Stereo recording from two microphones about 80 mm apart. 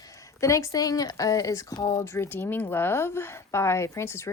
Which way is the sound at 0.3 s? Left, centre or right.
Left.